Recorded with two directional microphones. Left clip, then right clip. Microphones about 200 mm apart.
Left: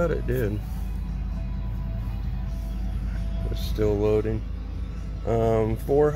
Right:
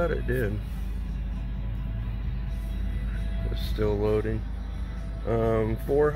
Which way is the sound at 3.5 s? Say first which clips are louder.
Left 3 dB; 15° left (ahead or behind).